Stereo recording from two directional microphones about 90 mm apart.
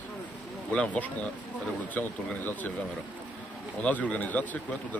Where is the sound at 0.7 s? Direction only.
15° left (ahead or behind).